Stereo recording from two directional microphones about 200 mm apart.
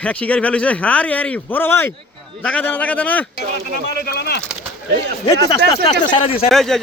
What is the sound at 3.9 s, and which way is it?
Speech, 50° left (ahead or behind).